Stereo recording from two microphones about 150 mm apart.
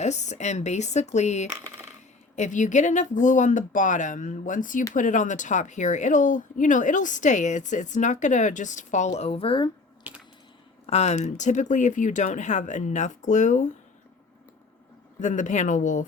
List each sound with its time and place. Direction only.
0.0 s speech: 50° left (ahead or behind)
10.0 s a sound: 10° right (ahead or behind)
10.8 s speech: 45° left (ahead or behind)
15.2 s speech: 55° left (ahead or behind)